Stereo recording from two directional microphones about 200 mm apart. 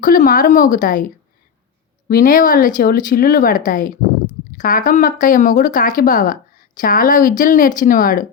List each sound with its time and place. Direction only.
0.0 s speech: 45° left (ahead or behind)
2.0 s a woman's voice: 45° left (ahead or behind)